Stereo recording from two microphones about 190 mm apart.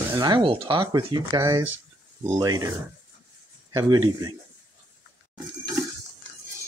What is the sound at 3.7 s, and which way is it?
Speech, 20° right (ahead or behind).